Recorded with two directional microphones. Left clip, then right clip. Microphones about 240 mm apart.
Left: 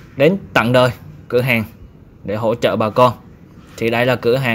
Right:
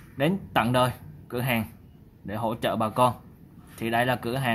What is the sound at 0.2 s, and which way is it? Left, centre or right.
Speech, centre.